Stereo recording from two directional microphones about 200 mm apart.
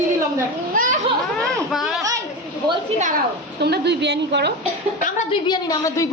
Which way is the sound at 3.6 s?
55° right (ahead or behind).